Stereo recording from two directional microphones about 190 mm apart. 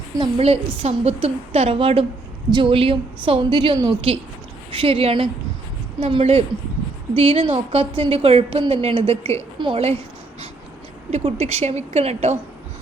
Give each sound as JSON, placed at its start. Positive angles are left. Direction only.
{"t": 0.2, "sound": "a woman's voice", "side_deg": -30}
{"t": 11.1, "sound": "a woman's voice", "side_deg": -30}